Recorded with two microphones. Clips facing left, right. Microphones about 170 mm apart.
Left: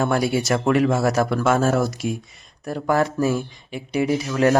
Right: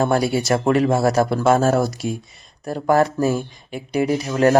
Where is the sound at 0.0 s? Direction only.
35° right (ahead or behind).